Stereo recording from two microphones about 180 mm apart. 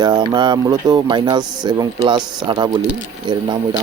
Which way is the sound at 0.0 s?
25° right (ahead or behind).